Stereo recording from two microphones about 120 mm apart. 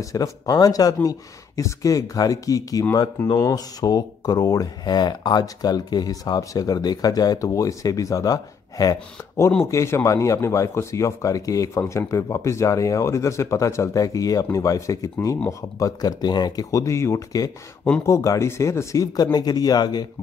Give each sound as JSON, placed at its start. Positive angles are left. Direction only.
{"t": 0.0, "sound": "speech", "side_deg": 30}